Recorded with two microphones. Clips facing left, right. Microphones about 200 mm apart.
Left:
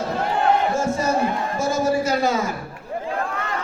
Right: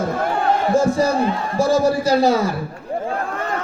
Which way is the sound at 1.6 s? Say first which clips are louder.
Right 5 dB; 35° right (ahead or behind).